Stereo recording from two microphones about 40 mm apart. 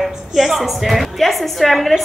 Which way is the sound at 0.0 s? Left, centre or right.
Centre.